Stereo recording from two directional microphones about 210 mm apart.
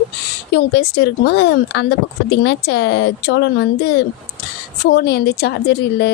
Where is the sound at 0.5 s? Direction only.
50° left (ahead or behind).